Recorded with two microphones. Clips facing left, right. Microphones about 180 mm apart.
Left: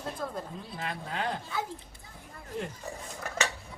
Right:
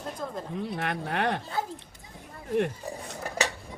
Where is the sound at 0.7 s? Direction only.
70° right (ahead or behind).